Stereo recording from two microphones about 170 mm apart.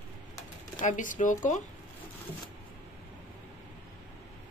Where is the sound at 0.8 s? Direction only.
50° left (ahead or behind).